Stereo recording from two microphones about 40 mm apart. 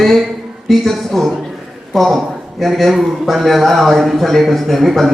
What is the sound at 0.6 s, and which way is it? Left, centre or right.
A man's voice, centre.